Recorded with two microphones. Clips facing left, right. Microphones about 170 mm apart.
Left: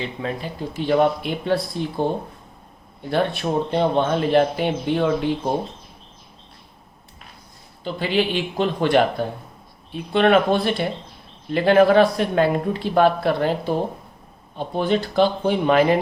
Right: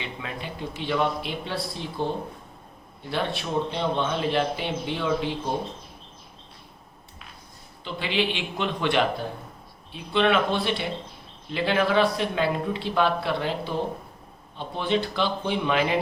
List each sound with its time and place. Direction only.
0.0 s speech: 40° left (ahead or behind)
3.1 s speech: 50° left (ahead or behind)
7.9 s speech: 45° left (ahead or behind)